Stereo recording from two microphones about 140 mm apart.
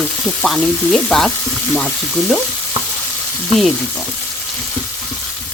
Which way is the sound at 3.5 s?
Centre (ahead or behind).